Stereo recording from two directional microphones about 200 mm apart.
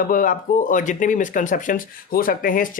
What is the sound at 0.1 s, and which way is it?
Speech, 40° left (ahead or behind).